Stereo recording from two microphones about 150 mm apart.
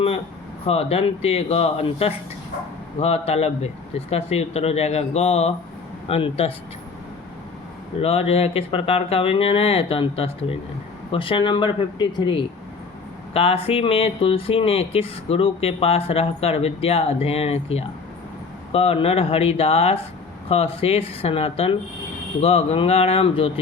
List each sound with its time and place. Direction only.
0.6 s speech: 40° left (ahead or behind)
8.0 s speech: 40° left (ahead or behind)